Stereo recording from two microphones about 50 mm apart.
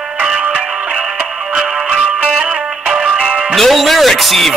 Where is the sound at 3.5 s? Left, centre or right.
Centre.